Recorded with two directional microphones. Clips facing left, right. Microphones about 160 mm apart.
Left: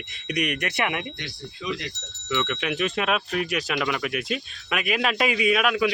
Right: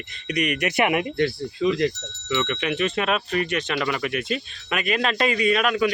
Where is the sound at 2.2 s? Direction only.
Centre (ahead or behind).